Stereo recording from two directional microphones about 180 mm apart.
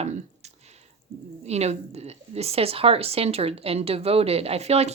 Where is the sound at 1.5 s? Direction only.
35° right (ahead or behind).